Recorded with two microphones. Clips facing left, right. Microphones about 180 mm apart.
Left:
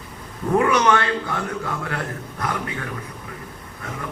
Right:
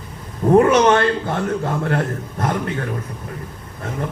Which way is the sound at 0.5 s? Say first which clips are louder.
Right 5 dB; 40° right (ahead or behind).